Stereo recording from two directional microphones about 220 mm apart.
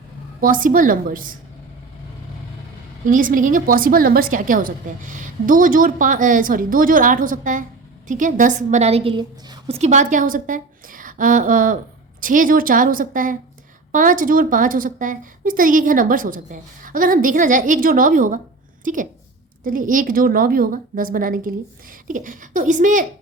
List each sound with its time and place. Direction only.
0.3 s a woman's voice: 40° right (ahead or behind)
3.1 s a woman's voice: 40° right (ahead or behind)
19.6 s a woman's voice: 40° right (ahead or behind)